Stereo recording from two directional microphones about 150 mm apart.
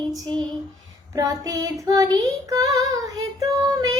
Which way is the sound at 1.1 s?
20° right (ahead or behind).